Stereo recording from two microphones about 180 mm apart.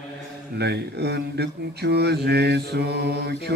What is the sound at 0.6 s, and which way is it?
Speech, 65° right (ahead or behind).